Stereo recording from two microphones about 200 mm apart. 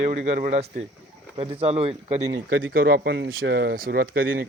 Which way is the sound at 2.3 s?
50° right (ahead or behind).